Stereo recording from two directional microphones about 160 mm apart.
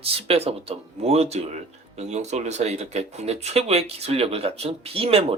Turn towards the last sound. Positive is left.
turn(degrees=-35)  # may be behind; listen again after turning